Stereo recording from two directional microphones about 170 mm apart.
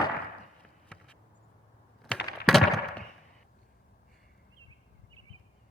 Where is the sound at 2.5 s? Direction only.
Centre (ahead or behind).